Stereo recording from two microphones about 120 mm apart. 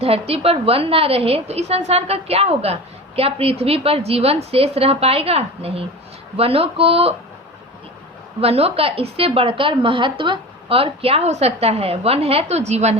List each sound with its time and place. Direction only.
0.0 s a woman's voice: 55° right (ahead or behind)
8.4 s a woman's voice: 55° right (ahead or behind)